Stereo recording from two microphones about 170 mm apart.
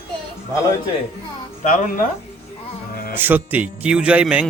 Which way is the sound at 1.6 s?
50° left (ahead or behind).